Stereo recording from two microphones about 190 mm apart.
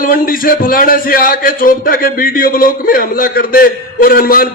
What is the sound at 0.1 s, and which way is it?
A man's voice, 50° left (ahead or behind).